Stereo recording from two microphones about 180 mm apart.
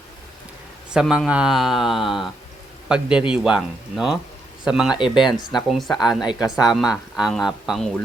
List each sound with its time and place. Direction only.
0.9 s speech: 5° right (ahead or behind)
4.9 s speech: 25° left (ahead or behind)
5.2 s speech: centre (ahead or behind)